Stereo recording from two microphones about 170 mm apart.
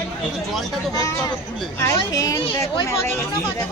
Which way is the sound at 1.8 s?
20° left (ahead or behind).